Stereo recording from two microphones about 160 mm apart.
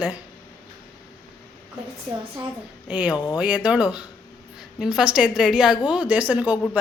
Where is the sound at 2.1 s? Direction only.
35° right (ahead or behind).